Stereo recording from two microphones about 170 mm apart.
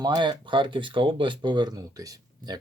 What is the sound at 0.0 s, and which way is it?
Speech, 25° right (ahead or behind).